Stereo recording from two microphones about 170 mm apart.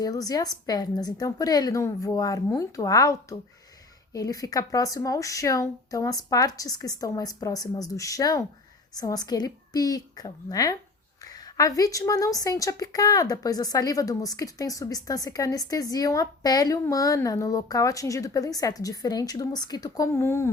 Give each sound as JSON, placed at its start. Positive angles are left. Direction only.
{"t": 0.0, "sound": "speech", "side_deg": 20}
{"t": 11.3, "sound": "a sound", "side_deg": 20}
{"t": 11.8, "sound": "speech", "side_deg": 20}